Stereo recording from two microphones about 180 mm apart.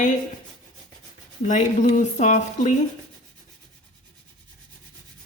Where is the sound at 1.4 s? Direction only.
45° left (ahead or behind).